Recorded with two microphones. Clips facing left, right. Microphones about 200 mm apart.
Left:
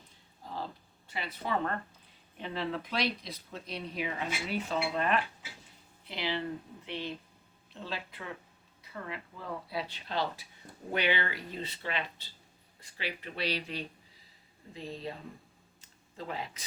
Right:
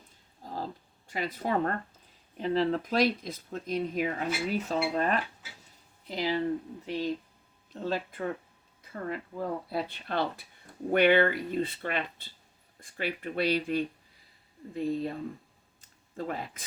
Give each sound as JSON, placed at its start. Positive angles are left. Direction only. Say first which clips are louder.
{"t": 0.4, "sound": "a sound", "louder": "right 3 dB", "side_deg": -40}
{"t": 2.4, "sound": "speech", "louder": "right 8 dB", "side_deg": -40}
{"t": 4.5, "sound": "dishes", "louder": "right 1 dB", "side_deg": -40}
{"t": 7.7, "sound": "speech", "louder": "right 8 dB", "side_deg": -45}
{"t": 16.1, "sound": "speech", "louder": "right 4 dB", "side_deg": -50}